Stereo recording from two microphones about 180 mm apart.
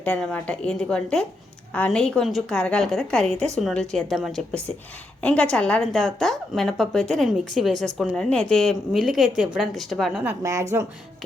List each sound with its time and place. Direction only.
0.0 s a woman's voice: 5° left (ahead or behind)
3.2 s a woman's voice: 35° right (ahead or behind)
3.5 s a woman's voice: centre (ahead or behind)
10.2 s speech: 15° right (ahead or behind)